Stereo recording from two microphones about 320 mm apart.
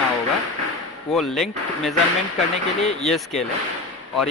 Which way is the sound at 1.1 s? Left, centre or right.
Centre.